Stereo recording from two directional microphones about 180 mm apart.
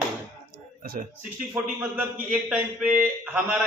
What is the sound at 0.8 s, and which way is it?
Speech, 55° right (ahead or behind).